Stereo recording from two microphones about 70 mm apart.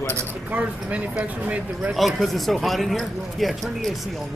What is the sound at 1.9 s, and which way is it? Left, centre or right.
Speech, centre.